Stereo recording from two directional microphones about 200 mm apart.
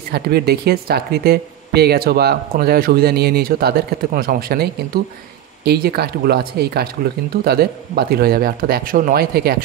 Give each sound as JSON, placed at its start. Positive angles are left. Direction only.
{"t": 0.1, "sound": "speech", "side_deg": -55}